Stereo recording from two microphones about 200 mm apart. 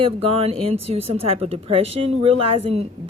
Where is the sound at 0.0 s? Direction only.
30° right (ahead or behind).